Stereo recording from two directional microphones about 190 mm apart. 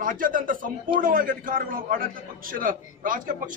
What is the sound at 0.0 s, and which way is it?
A man's voice, 45° right (ahead or behind).